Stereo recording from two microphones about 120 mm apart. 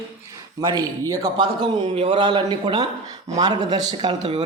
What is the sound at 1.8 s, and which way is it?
Speech, 55° right (ahead or behind).